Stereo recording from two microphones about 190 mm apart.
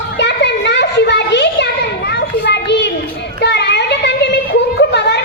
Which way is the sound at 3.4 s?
65° left (ahead or behind).